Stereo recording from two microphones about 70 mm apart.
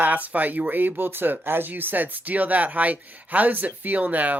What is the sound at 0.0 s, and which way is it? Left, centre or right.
Speech, right.